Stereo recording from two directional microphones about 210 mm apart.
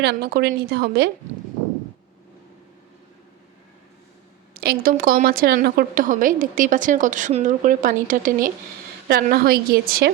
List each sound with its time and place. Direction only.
0.0 s a woman's voice: 50° right (ahead or behind)
4.5 s a woman's voice: 45° right (ahead or behind)